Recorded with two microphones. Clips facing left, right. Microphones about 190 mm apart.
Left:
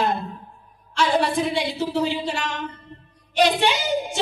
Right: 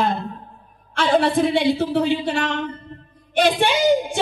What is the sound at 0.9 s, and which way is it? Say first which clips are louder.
A woman's voice: right 3 dB; 55° right (ahead or behind).